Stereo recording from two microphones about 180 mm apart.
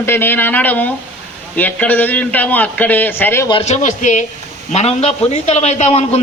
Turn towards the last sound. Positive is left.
turn(degrees=35)  # may be behind; listen again after turning